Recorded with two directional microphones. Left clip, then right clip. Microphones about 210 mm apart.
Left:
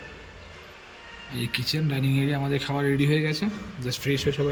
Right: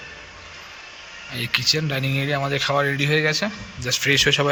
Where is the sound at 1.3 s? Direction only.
10° left (ahead or behind).